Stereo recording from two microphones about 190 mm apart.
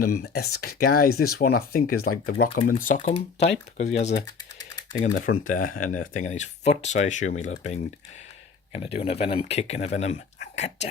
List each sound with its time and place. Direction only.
0.0 s speech: 55° left (ahead or behind); by 4.1 s 35° left (ahead or behind)
4.3 s typing: 20° left (ahead or behind)
5.0 s speech: 45° left (ahead or behind)